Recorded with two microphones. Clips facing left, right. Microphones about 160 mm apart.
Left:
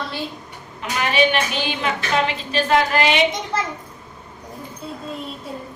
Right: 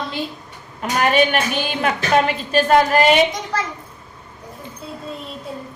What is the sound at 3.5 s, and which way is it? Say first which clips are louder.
Speech: even; 25° left (ahead or behind).